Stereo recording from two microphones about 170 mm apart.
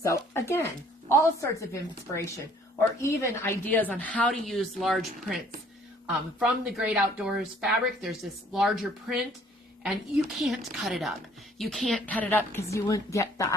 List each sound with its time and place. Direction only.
0.0 s a woman's voice: 15° left (ahead or behind); by 5.4 s centre (ahead or behind)
6.4 s a woman's voice: 5° right (ahead or behind); by 13.6 s 20° left (ahead or behind)